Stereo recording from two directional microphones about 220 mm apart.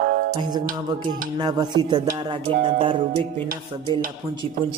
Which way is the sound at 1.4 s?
20° right (ahead or behind).